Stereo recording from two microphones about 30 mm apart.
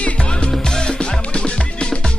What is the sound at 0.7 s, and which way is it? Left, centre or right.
Music, left.